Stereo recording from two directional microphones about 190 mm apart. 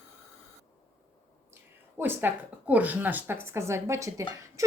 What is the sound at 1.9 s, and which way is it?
A woman's voice, 10° right (ahead or behind).